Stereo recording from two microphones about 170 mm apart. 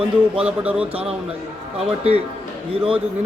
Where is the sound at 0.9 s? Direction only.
35° right (ahead or behind).